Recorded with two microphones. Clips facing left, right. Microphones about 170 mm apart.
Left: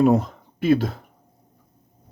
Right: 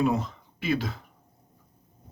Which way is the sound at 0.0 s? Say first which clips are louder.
Left 8 dB; 50° left (ahead or behind).